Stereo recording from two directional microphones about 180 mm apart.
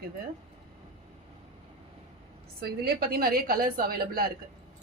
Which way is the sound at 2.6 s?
55° right (ahead or behind).